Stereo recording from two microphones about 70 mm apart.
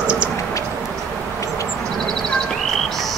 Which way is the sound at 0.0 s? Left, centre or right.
Centre.